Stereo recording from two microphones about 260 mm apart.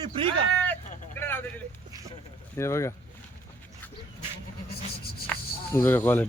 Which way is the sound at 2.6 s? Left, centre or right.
Centre.